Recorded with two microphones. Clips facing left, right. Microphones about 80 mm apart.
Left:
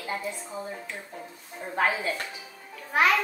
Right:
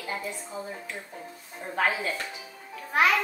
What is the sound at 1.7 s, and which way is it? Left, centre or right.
Speech, centre.